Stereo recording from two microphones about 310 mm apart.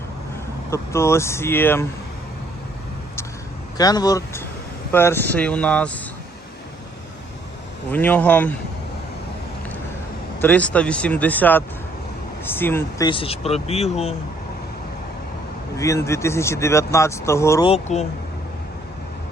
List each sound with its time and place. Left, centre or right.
0.7 s speech: centre
3.8 s speech: centre
7.9 s speech: centre
10.4 s speech: centre
15.8 s speech: centre